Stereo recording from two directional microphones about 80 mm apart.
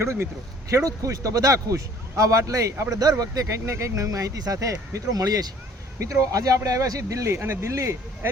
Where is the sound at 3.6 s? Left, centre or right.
Right.